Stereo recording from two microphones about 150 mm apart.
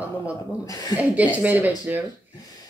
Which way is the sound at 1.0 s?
10° right (ahead or behind).